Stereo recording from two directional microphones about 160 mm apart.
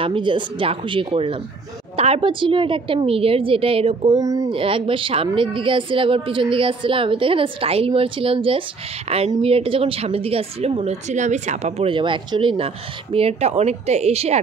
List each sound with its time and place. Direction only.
0.0 s a woman's voice: 30° right (ahead or behind)
4.1 s speech: 20° right (ahead or behind)
4.5 s a woman's voice: 35° right (ahead or behind)